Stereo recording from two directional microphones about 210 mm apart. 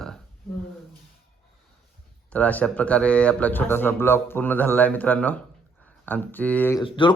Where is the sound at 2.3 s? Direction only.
5° left (ahead or behind).